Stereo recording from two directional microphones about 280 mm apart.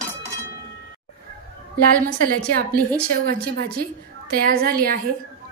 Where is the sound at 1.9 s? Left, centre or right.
Right.